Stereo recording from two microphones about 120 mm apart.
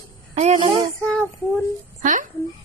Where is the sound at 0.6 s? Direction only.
45° right (ahead or behind).